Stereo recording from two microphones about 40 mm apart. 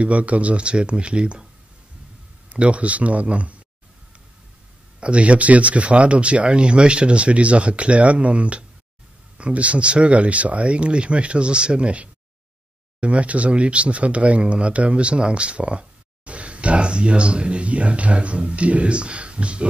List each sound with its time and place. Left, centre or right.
0.0 s speech: right
2.5 s speech: right
5.0 s speech: right